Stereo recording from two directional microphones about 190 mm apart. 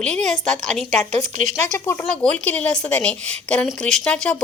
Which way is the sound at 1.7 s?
15° left (ahead or behind).